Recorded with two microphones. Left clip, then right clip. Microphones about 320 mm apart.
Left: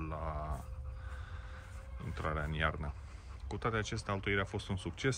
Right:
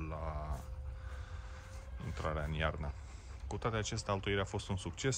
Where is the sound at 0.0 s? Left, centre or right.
Centre.